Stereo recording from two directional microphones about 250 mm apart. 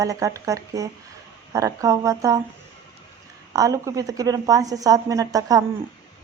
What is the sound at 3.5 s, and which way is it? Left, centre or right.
A woman's voice, centre.